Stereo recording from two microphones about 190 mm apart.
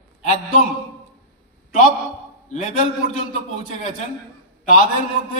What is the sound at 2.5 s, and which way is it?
Speech, 40° left (ahead or behind).